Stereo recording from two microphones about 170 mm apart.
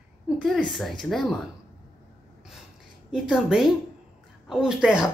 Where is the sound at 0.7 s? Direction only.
Centre (ahead or behind).